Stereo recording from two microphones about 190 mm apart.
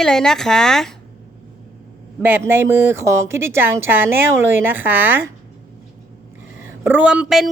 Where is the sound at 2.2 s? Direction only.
10° right (ahead or behind).